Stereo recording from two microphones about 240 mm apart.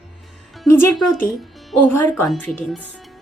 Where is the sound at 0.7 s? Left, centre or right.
Centre.